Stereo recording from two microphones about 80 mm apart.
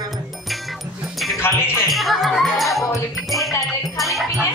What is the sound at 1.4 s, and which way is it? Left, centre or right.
Music, left.